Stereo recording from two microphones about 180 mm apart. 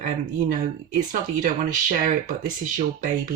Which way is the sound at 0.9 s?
45° right (ahead or behind).